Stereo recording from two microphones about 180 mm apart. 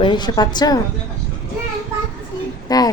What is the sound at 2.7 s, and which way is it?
Speech, 20° left (ahead or behind).